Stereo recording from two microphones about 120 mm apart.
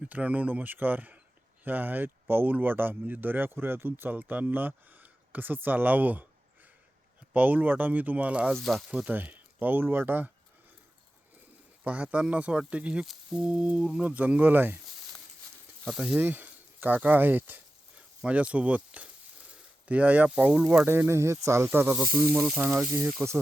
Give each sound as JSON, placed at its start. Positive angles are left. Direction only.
{"t": 0.1, "sound": "speech", "side_deg": -15}
{"t": 7.3, "sound": "speech", "side_deg": -15}
{"t": 8.5, "sound": "speech", "side_deg": 0}
{"t": 8.9, "sound": "speech", "side_deg": -10}
{"t": 11.8, "sound": "speech", "side_deg": -10}
{"t": 15.8, "sound": "speech", "side_deg": -5}
{"t": 20.8, "sound": "speech", "side_deg": -15}
{"t": 22.9, "sound": "speech", "side_deg": -25}